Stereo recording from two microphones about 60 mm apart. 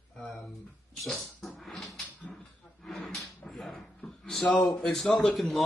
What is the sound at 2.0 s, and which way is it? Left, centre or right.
Dog, left.